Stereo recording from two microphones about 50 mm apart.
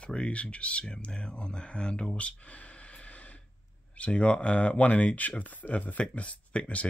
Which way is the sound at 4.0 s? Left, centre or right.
Left.